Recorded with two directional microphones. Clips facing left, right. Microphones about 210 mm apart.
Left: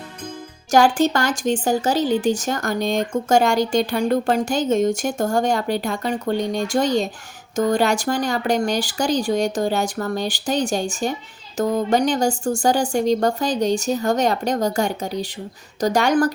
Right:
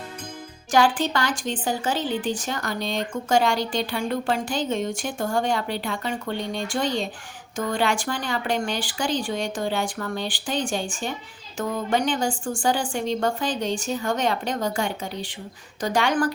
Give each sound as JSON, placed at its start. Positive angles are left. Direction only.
{"t": 0.7, "sound": "speech", "side_deg": 45}